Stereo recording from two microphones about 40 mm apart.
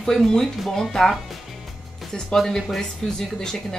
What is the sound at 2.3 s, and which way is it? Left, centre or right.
Speech, centre.